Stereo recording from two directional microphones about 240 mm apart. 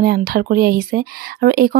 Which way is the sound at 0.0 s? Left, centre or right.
Right.